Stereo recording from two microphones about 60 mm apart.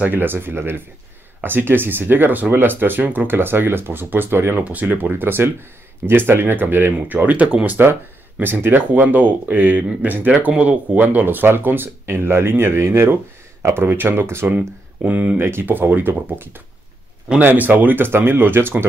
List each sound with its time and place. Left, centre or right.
0.0 s speech: right
15.0 s speech: right
15.3 s speech: right